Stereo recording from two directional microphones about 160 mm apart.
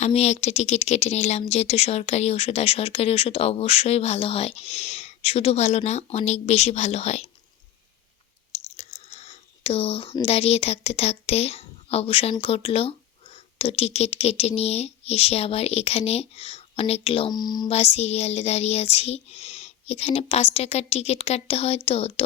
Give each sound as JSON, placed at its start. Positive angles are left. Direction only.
{"t": 0.0, "sound": "speech", "side_deg": 40}
{"t": 8.5, "sound": "speech", "side_deg": 40}
{"t": 17.3, "sound": "speech", "side_deg": 25}
{"t": 17.7, "sound": "speech", "side_deg": 40}